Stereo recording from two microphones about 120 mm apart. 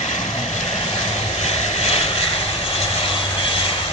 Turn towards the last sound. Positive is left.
turn(degrees=50)  # may be behind; listen again after turning